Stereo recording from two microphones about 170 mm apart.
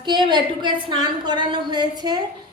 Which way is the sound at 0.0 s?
25° right (ahead or behind).